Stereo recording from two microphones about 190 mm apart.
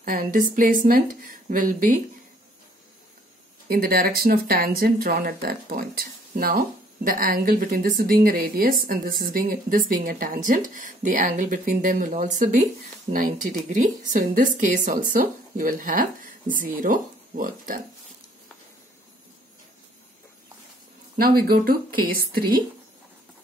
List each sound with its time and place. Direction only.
0.0 s speech: 45° right (ahead or behind)
3.6 s speech: 50° right (ahead or behind)
21.2 s speech: 50° right (ahead or behind)